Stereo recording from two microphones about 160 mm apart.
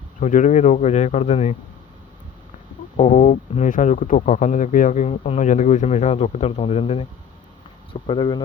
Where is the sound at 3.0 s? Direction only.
40° left (ahead or behind).